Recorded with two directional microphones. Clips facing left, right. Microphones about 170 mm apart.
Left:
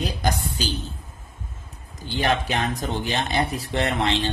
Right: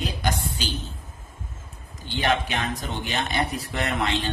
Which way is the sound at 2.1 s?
35° left (ahead or behind).